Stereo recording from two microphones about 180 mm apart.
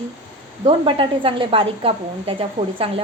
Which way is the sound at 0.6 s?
30° right (ahead or behind).